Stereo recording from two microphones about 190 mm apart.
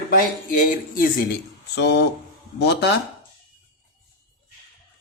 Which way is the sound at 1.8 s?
60° left (ahead or behind).